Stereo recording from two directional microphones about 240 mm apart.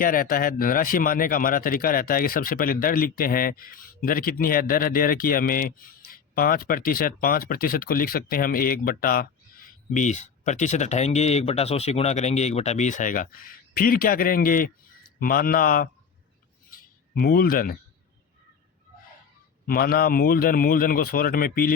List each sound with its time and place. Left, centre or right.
0.0 s speech: left
16.7 s a sound: left
19.6 s speech: left